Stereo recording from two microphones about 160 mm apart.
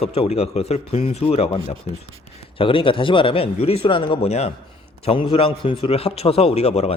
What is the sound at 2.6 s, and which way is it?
A man's voice, 35° left (ahead or behind).